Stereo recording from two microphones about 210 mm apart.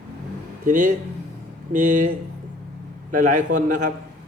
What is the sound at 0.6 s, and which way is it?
A man's voice, 40° right (ahead or behind).